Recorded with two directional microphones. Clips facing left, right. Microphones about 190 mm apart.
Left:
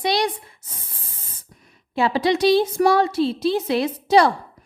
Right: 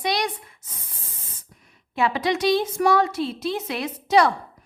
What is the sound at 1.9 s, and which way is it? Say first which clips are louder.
A woman's voice: left 4 dB; 30° left (ahead or behind).